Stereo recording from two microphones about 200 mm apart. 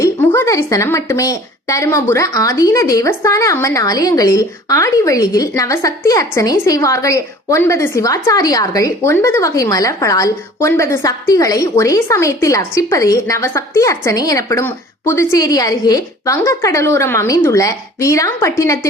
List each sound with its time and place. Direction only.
0.0 s a woman's voice: 15° left (ahead or behind)